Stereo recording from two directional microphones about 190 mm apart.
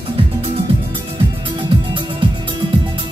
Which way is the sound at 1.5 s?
25° right (ahead or behind).